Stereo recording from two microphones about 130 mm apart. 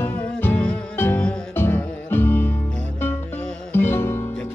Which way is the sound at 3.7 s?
15° left (ahead or behind).